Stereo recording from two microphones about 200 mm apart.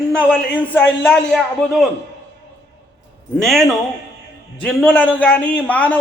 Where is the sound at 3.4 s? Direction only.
Centre (ahead or behind).